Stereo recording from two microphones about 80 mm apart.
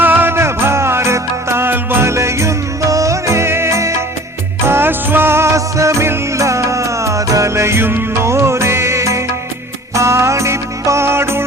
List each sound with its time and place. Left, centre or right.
0.0 s music: right